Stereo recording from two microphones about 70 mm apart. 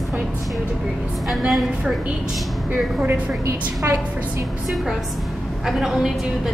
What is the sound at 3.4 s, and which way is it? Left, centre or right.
Speech, right.